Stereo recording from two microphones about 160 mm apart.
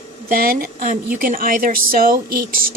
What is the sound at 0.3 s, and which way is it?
A woman's voice, 65° right (ahead or behind).